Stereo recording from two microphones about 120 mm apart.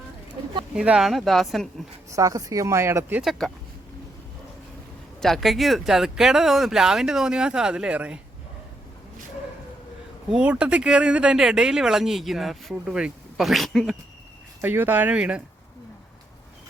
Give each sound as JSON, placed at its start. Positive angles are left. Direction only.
{"t": 0.8, "sound": "speech", "side_deg": -5}
{"t": 2.0, "sound": "a woman's voice", "side_deg": -25}
{"t": 3.2, "sound": "speech", "side_deg": 0}
{"t": 5.2, "sound": "speech", "side_deg": 0}
{"t": 10.3, "sound": "speech", "side_deg": -10}
{"t": 14.6, "sound": "speech", "side_deg": -15}